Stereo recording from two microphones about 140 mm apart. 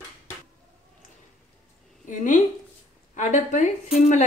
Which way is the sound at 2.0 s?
65° left (ahead or behind).